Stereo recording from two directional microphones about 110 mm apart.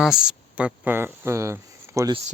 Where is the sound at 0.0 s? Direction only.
5° right (ahead or behind); by 2.0 s 25° right (ahead or behind).